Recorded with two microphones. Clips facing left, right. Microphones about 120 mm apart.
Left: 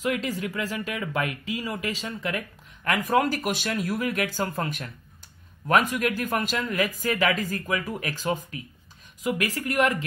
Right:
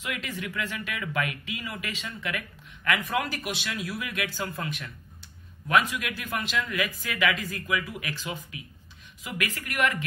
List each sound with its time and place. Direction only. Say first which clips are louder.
0.0 s a man's voice: left 7 dB; 35° left (ahead or behind)